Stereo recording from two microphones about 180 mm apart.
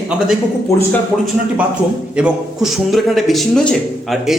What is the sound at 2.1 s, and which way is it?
Speech, 5° right (ahead or behind).